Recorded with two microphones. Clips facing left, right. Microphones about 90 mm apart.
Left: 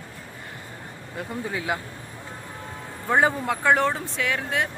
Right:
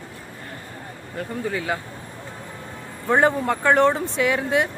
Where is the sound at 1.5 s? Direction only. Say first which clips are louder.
Right 1 dB; 15° left (ahead or behind).